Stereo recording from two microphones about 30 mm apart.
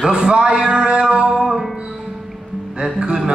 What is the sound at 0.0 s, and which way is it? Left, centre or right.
Music, right.